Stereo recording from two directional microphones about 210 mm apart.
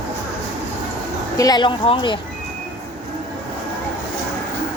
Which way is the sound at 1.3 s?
20° left (ahead or behind).